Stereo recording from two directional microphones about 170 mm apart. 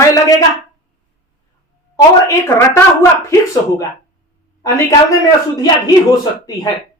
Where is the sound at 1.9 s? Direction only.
15° left (ahead or behind).